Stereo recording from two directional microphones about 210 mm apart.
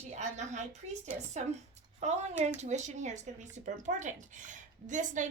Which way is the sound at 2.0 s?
30° right (ahead or behind).